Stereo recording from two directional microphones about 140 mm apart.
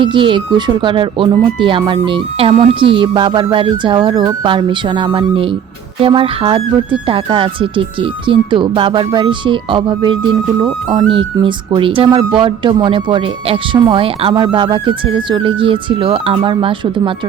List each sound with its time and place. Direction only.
0.0 s speech: 35° right (ahead or behind)